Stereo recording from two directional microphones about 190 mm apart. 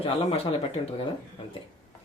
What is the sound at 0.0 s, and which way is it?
Speech, 30° left (ahead or behind).